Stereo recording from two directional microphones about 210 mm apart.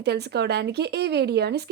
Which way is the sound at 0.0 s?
50° right (ahead or behind).